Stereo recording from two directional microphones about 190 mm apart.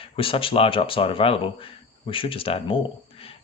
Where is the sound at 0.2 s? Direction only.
30° left (ahead or behind).